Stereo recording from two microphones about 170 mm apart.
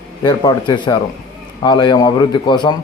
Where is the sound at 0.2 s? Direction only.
25° left (ahead or behind).